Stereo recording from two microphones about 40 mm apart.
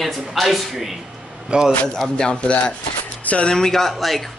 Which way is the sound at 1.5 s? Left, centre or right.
Right.